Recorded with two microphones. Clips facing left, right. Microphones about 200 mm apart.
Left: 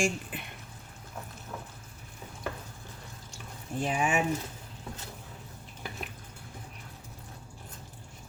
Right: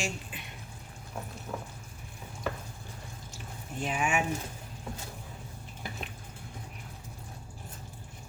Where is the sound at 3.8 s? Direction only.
35° left (ahead or behind).